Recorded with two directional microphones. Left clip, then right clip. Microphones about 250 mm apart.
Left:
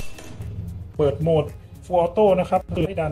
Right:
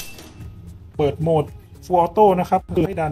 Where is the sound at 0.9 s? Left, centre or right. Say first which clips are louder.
Right 1 dB; right.